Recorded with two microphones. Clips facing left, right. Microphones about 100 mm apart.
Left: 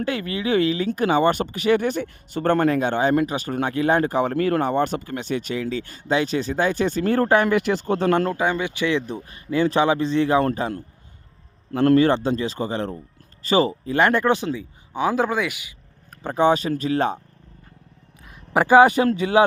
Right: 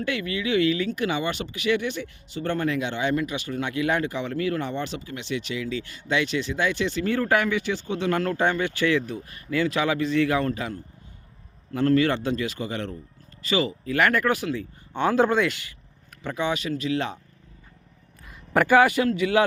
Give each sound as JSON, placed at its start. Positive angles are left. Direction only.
{"t": 0.0, "sound": "speech", "side_deg": 35}
{"t": 8.4, "sound": "speech", "side_deg": 15}
{"t": 11.9, "sound": "speech", "side_deg": 35}
{"t": 14.5, "sound": "speech", "side_deg": 10}
{"t": 16.2, "sound": "speech", "side_deg": 40}
{"t": 18.5, "sound": "speech", "side_deg": 20}
{"t": 18.9, "sound": "speech", "side_deg": 35}